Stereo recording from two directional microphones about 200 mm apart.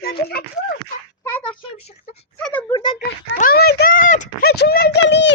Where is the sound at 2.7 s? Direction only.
25° left (ahead or behind).